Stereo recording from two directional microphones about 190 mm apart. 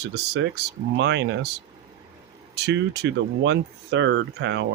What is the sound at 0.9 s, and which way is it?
Speech, 65° right (ahead or behind).